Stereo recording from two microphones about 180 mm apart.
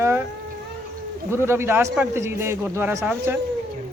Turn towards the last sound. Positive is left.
turn(degrees=-15)  # may be behind; listen again after turning